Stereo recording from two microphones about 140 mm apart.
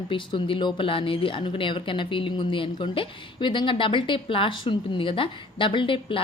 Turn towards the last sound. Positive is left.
turn(degrees=40)  # may be behind; listen again after turning